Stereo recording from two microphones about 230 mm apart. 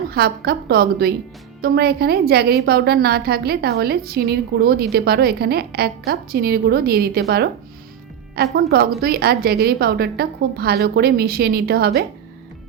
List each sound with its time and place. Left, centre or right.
0.1 s a woman's voice: right
8.5 s a woman's voice: right